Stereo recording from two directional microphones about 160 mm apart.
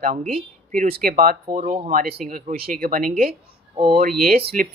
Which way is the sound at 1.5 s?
55° right (ahead or behind).